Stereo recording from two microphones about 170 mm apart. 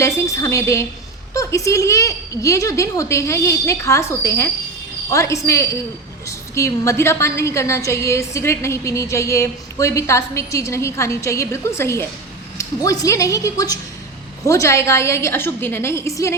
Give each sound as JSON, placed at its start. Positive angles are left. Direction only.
{"t": 0.0, "sound": "a woman's voice", "side_deg": 15}